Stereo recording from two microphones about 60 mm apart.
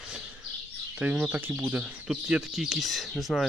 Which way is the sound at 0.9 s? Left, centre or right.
Right.